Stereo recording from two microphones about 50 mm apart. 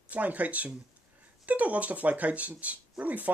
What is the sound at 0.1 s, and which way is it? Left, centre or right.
Speech, right.